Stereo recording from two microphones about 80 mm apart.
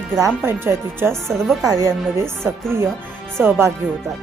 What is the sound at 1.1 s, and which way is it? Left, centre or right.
Speech, centre.